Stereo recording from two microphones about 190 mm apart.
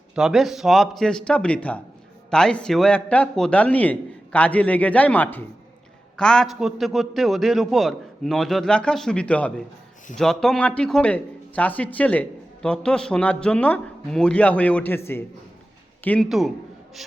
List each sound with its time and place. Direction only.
0.2 s a man's voice: centre (ahead or behind)